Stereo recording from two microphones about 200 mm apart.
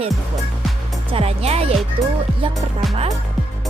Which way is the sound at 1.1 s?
30° right (ahead or behind).